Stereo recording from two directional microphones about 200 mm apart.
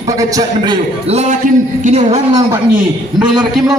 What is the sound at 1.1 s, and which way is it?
A man's voice, 35° right (ahead or behind).